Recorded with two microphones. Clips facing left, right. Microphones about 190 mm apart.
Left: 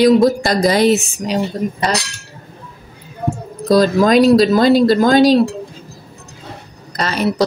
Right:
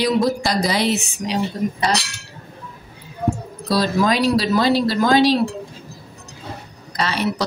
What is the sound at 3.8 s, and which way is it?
Speech, 50° left (ahead or behind).